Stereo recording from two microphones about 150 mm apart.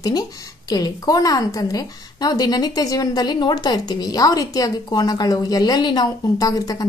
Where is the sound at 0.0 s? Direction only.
25° left (ahead or behind).